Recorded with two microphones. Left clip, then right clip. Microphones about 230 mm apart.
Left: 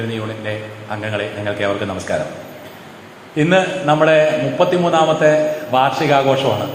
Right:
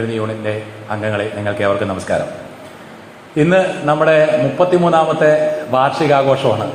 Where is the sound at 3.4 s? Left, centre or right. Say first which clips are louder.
Right 2 dB; right.